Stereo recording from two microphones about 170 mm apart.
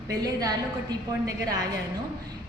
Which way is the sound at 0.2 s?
20° right (ahead or behind).